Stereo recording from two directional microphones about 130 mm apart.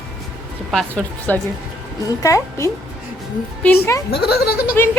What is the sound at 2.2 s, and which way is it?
A woman's voice, 25° left (ahead or behind).